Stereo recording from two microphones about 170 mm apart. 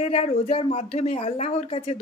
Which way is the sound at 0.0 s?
40° left (ahead or behind).